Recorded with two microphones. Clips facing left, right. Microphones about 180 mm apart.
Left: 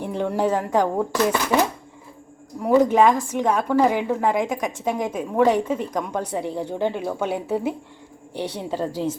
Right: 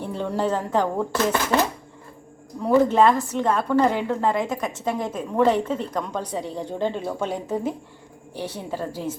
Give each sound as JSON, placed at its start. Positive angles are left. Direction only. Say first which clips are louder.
{"t": 0.0, "sound": "a woman's voice", "louder": "left 2 dB", "side_deg": 15}